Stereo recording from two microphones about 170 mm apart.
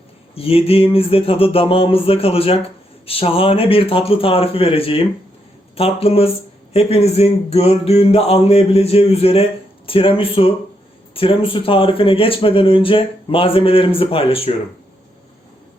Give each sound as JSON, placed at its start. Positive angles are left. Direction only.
{"t": 0.3, "sound": "speech", "side_deg": 35}